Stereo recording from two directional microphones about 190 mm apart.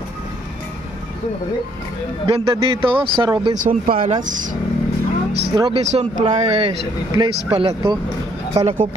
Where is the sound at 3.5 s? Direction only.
45° right (ahead or behind).